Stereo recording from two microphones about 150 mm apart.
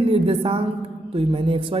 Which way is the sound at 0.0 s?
40° right (ahead or behind).